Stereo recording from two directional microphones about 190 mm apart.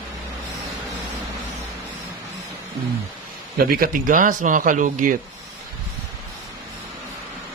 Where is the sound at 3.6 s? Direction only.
50° right (ahead or behind).